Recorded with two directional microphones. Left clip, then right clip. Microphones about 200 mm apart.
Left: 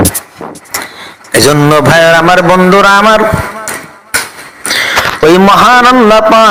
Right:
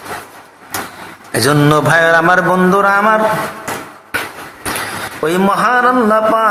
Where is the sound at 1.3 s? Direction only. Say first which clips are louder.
Left 6 dB; 25° left (ahead or behind).